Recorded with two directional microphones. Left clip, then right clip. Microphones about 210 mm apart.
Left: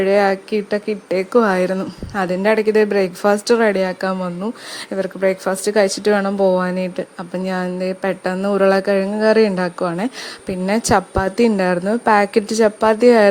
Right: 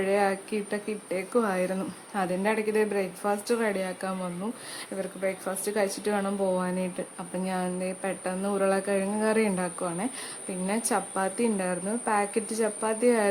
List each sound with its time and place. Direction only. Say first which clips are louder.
0.0 s speech: left 11 dB; 30° left (ahead or behind)